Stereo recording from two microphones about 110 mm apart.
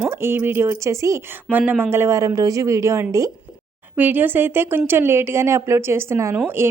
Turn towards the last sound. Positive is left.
turn(degrees=-20)  # may be behind; listen again after turning